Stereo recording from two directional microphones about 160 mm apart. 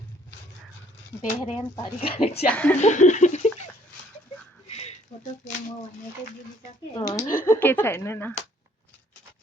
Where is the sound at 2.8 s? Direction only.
50° left (ahead or behind).